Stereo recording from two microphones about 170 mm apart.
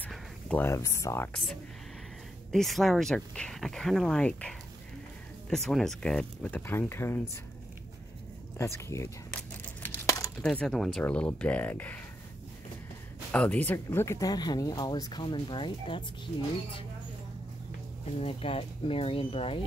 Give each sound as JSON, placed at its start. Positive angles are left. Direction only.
{"t": 0.0, "sound": "speech", "side_deg": 10}
{"t": 2.5, "sound": "speech", "side_deg": 0}
{"t": 8.5, "sound": "speech", "side_deg": 15}
{"t": 9.8, "sound": "crumpling", "side_deg": 20}
{"t": 10.4, "sound": "speech", "side_deg": 5}
{"t": 13.3, "sound": "speech", "side_deg": 10}
{"t": 18.2, "sound": "speech", "side_deg": 35}